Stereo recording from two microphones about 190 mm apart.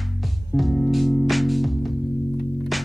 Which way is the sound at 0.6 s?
Centre (ahead or behind).